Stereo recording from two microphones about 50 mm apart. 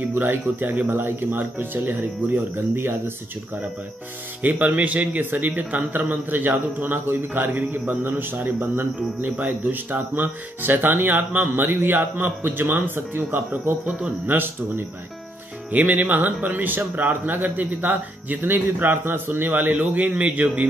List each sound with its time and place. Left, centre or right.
0.2 s speech: right
4.4 s speech: right
13.8 s speech: centre
14.2 s speech: right